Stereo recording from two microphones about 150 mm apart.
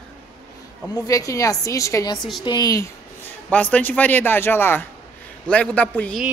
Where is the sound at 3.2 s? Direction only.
10° left (ahead or behind).